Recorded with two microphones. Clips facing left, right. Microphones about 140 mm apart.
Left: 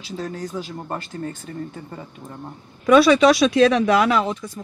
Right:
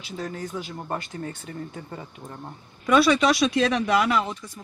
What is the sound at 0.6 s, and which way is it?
Speech, 10° right (ahead or behind).